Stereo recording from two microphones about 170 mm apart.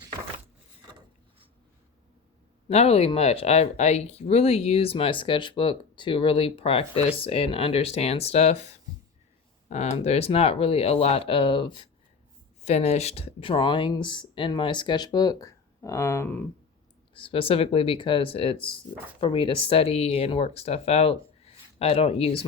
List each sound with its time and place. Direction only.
2.6 s speech: 35° left (ahead or behind)
12.6 s speech: 40° left (ahead or behind); by 16.5 s 10° left (ahead or behind)
17.2 s speech: 30° left (ahead or behind)